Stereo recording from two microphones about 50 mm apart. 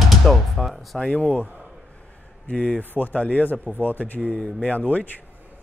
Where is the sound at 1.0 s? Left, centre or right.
Left.